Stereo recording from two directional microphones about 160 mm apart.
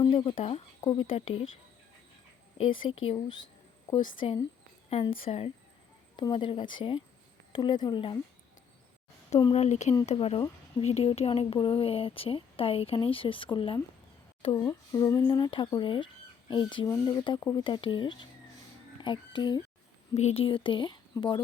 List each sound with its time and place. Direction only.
0.0 s speech: 30° left (ahead or behind)
2.6 s speech: 30° left (ahead or behind)
9.5 s speech: 45° left (ahead or behind)
10.1 s speech: 35° left (ahead or behind)
14.6 s speech: 25° left (ahead or behind)
20.1 s speech: 40° left (ahead or behind)